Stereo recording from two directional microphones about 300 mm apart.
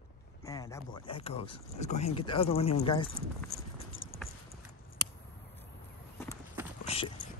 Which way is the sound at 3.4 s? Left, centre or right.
Left.